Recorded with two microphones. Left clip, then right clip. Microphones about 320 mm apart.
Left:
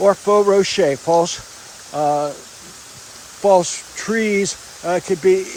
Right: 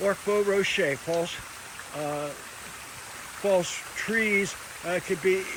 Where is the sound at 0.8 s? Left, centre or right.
Left.